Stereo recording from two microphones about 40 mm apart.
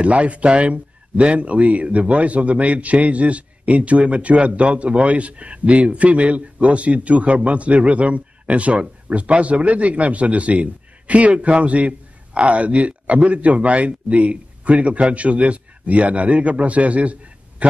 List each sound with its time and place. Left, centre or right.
0.0 s a man's voice: right